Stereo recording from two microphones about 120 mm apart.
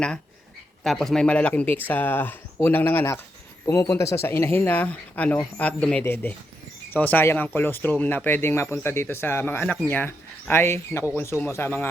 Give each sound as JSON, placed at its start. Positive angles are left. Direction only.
{"t": 0.9, "sound": "speech", "side_deg": 5}